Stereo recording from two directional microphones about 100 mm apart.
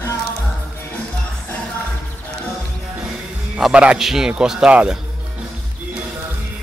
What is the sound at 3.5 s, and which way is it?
Speech, 10° right (ahead or behind).